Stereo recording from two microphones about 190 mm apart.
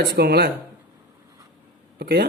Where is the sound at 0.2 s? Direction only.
55° right (ahead or behind).